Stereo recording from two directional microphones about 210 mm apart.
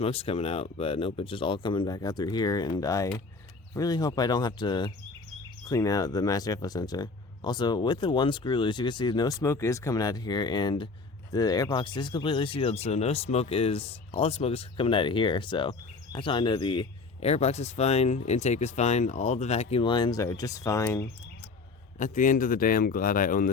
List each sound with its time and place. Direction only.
0.0 s speech: 30° left (ahead or behind)
21.9 s speech: 35° left (ahead or behind)